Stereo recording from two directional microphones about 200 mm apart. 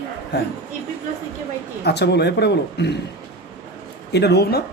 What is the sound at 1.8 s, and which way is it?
Speech, 55° left (ahead or behind).